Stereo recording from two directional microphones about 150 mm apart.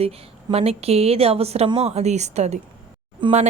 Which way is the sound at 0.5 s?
40° right (ahead or behind).